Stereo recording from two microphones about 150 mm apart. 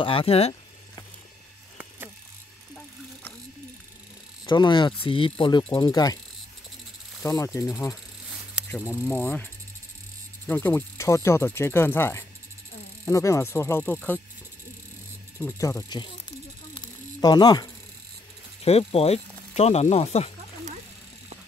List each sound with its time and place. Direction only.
0.0 s speech: 40° left (ahead or behind)
2.7 s a sound: 10° left (ahead or behind)
4.5 s speech: 30° left (ahead or behind)
7.2 s insect: 20° left (ahead or behind)
9.0 s speech: 15° left (ahead or behind)
15.3 s insect: 20° left (ahead or behind)
16.7 s a sound: 30° left (ahead or behind)
18.6 s speech: 40° left (ahead or behind)